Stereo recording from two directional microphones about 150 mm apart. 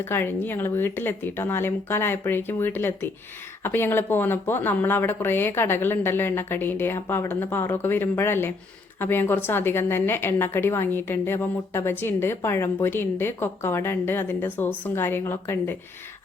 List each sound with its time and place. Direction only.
0.0 s a woman's voice: 15° left (ahead or behind)